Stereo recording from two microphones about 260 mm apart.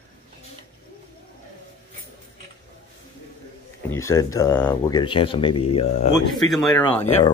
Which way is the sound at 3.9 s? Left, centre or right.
Centre.